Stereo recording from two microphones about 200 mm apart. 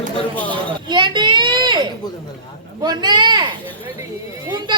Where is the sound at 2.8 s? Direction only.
20° right (ahead or behind).